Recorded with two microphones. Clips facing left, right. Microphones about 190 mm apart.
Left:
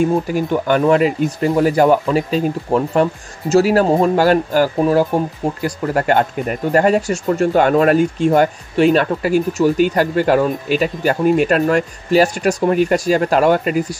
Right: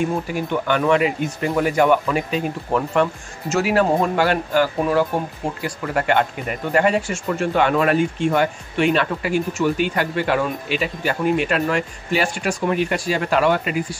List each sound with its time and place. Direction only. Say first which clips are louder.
0.3 s speech: left 5 dB; 40° left (ahead or behind)